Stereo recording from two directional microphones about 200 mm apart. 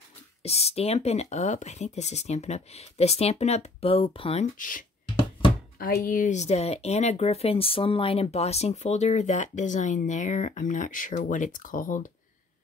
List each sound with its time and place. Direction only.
0.4 s speech: 30° left (ahead or behind)
4.6 s speech: 40° left (ahead or behind)
5.0 s a sound: 25° left (ahead or behind)
5.8 s speech: 45° left (ahead or behind)